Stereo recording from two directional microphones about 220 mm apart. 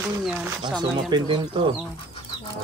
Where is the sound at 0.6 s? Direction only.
20° right (ahead or behind).